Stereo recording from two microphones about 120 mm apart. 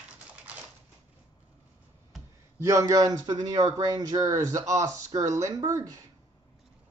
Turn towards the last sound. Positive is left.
turn(degrees=-25)  # may be behind; listen again after turning